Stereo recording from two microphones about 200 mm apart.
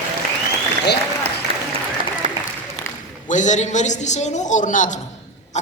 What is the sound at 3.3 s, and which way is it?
A man's voice, 35° left (ahead or behind).